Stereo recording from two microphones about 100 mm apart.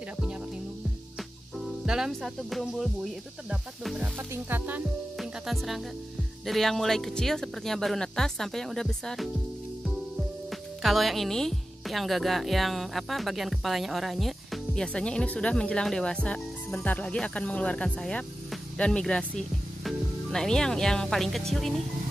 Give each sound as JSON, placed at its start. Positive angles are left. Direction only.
{"t": 1.9, "sound": "speech", "side_deg": -5}
{"t": 5.1, "sound": "speech", "side_deg": 0}
{"t": 10.8, "sound": "speech", "side_deg": 0}